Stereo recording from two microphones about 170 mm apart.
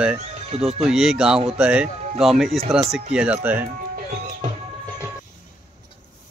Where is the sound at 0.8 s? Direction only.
5° right (ahead or behind).